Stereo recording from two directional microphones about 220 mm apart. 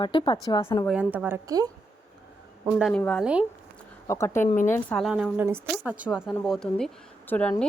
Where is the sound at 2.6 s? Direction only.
Centre (ahead or behind).